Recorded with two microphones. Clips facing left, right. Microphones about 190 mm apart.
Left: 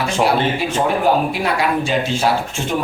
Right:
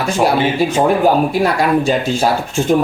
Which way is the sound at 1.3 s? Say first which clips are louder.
Right 5 dB; 40° right (ahead or behind).